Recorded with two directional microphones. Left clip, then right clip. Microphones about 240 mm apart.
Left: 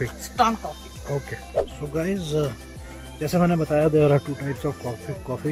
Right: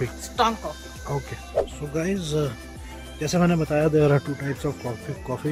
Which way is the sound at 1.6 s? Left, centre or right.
Centre.